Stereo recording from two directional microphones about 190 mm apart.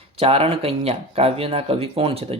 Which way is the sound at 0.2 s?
30° right (ahead or behind).